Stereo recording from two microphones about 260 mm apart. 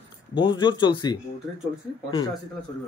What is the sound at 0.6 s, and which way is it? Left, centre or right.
Speech, centre.